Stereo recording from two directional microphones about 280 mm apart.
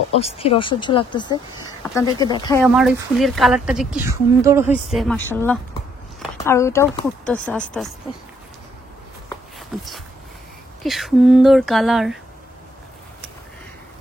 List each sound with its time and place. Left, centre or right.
0.2 s speech: left
2.6 s speech: centre
4.8 s speech: centre
10.8 s speech: centre